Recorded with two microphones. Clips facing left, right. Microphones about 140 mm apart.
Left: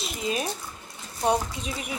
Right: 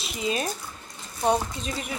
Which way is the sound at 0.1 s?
Centre (ahead or behind).